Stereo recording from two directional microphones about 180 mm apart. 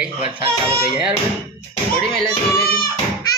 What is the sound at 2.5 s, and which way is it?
Speech, 55° left (ahead or behind).